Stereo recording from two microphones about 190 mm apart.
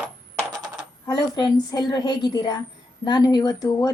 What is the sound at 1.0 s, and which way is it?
Speech, 20° left (ahead or behind).